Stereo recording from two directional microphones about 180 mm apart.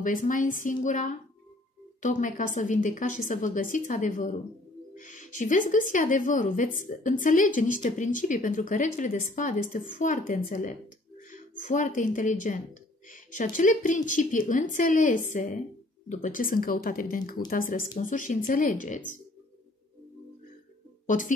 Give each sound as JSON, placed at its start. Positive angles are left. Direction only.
{"t": 0.0, "sound": "a woman's voice", "side_deg": 45}